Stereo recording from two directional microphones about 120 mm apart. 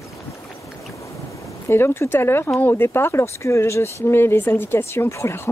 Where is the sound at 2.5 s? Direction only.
15° left (ahead or behind).